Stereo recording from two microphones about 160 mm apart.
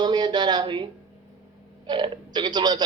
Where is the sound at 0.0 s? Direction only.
25° right (ahead or behind).